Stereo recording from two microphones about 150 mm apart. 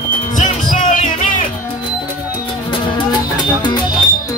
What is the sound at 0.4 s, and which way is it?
Music, 55° left (ahead or behind).